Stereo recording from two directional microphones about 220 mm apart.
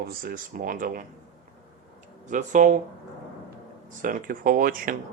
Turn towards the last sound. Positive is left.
turn(degrees=-40)  # may be behind; listen again after turning